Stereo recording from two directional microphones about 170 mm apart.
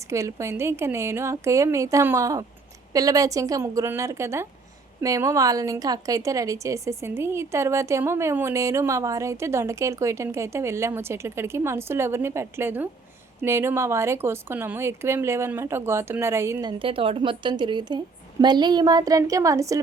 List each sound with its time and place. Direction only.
0.1 s a woman's voice: 15° right (ahead or behind)